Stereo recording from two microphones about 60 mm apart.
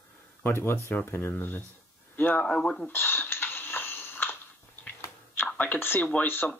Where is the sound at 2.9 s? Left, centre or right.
Left.